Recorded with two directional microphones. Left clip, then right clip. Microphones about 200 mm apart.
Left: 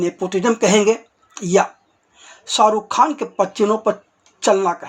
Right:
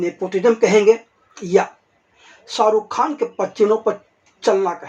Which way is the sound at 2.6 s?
30° left (ahead or behind).